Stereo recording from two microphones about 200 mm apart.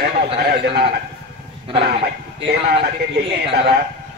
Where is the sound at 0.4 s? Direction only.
50° right (ahead or behind).